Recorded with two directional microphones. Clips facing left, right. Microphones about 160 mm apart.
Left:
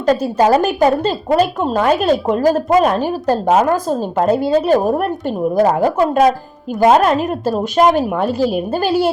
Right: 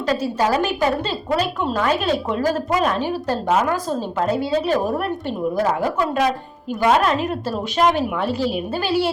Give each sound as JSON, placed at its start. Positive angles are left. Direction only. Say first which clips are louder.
{"t": 0.0, "sound": "a woman's voice", "louder": "left 6 dB", "side_deg": 45}